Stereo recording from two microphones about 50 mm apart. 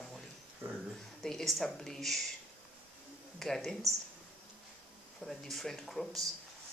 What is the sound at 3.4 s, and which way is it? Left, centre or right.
Speech, centre.